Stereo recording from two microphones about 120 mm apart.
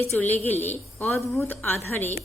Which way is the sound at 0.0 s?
15° left (ahead or behind).